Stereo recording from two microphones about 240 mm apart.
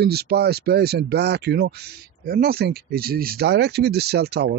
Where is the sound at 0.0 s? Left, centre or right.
Right.